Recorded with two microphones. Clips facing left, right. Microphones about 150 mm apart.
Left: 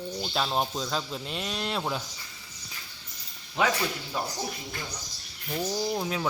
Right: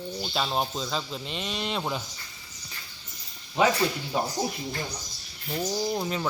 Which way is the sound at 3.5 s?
10° right (ahead or behind).